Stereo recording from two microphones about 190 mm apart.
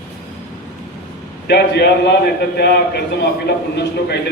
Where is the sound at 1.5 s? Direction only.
60° left (ahead or behind).